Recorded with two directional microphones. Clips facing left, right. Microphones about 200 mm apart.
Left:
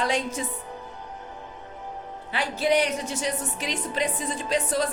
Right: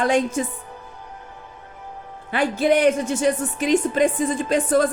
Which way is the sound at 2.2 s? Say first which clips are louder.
Right 6 dB; 50° right (ahead or behind).